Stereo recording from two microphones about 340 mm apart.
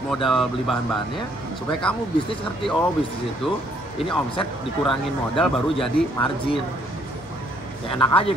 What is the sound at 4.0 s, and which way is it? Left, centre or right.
Speech, centre.